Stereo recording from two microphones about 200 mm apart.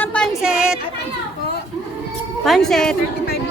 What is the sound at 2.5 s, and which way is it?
Speech, centre (ahead or behind).